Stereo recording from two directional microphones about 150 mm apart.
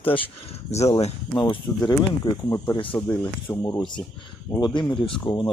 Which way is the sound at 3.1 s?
20° left (ahead or behind).